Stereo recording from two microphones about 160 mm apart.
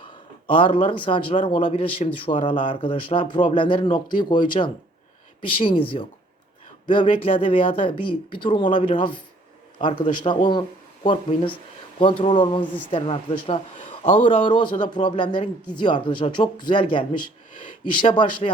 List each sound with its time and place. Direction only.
0.0 s speech: 30° left (ahead or behind)
14.0 s speech: 50° left (ahead or behind)
14.3 s speech: 30° left (ahead or behind)